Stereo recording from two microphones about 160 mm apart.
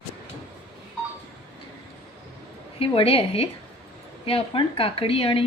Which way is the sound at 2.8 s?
35° left (ahead or behind).